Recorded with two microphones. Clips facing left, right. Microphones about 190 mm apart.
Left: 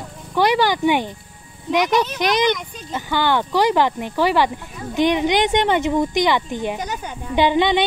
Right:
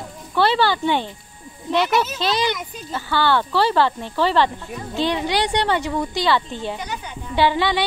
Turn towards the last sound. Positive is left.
turn(degrees=20)  # may be behind; listen again after turning